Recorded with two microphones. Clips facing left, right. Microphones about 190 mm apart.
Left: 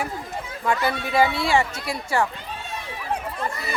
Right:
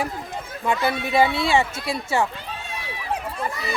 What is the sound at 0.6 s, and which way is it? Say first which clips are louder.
A man's voice: right 1 dB; 20° right (ahead or behind).